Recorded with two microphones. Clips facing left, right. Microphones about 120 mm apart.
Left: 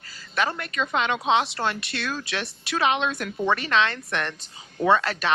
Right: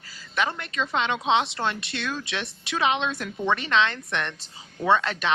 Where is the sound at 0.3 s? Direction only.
20° right (ahead or behind).